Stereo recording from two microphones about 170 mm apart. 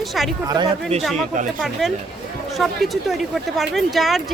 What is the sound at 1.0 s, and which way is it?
Speech, centre (ahead or behind).